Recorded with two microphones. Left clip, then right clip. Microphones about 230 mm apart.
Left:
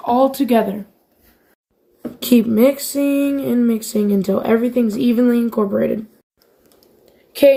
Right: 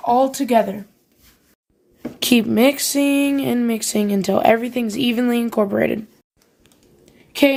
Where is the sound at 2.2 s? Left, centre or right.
Right.